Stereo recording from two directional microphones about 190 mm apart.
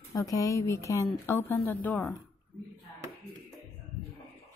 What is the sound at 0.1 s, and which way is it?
Speech, 20° left (ahead or behind).